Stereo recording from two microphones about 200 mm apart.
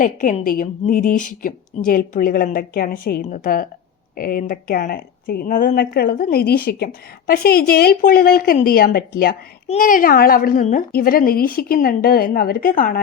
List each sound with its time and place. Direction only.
0.0 s a woman's voice: 40° left (ahead or behind)